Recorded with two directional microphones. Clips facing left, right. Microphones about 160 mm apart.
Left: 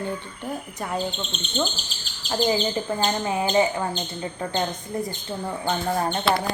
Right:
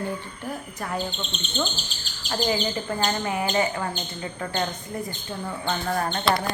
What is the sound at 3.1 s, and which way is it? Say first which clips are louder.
Speech: left 2 dB; 20° left (ahead or behind).